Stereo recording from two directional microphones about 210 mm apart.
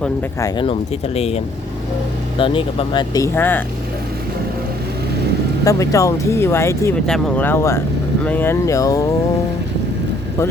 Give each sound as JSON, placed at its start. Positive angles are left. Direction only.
{"t": 0.0, "sound": "speech", "side_deg": 15}
{"t": 2.4, "sound": "speech", "side_deg": 25}
{"t": 5.6, "sound": "speech", "side_deg": 15}